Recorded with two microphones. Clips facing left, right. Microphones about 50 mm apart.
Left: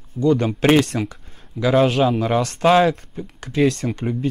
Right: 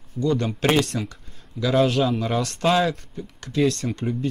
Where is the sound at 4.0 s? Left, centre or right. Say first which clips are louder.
Left 2 dB; left.